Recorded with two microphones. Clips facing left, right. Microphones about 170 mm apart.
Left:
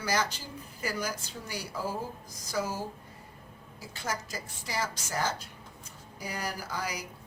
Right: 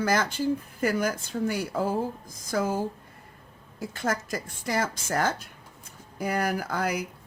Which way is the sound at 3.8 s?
55° right (ahead or behind).